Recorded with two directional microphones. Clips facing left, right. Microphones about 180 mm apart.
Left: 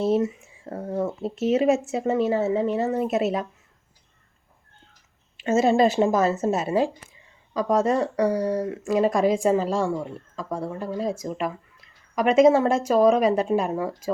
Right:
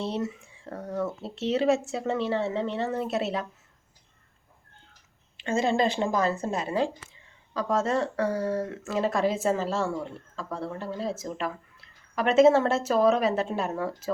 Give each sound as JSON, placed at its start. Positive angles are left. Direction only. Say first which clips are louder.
{"t": 0.2, "sound": "a woman's voice", "louder": "left 6 dB", "side_deg": 20}
{"t": 2.0, "sound": "speech", "louder": "left 5 dB", "side_deg": 5}
{"t": 2.9, "sound": "speech", "louder": "left 5 dB", "side_deg": 15}
{"t": 5.5, "sound": "a woman's voice", "louder": "left 6 dB", "side_deg": 20}